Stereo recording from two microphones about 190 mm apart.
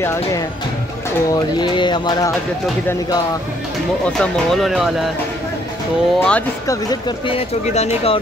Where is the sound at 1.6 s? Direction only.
25° left (ahead or behind).